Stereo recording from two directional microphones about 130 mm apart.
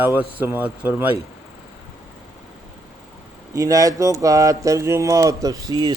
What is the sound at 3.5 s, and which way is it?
Speech, 25° right (ahead or behind).